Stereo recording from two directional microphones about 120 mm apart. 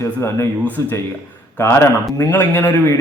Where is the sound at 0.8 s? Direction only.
25° left (ahead or behind).